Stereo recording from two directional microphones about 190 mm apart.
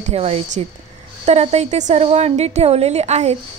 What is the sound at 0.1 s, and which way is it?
A woman's voice, 30° right (ahead or behind).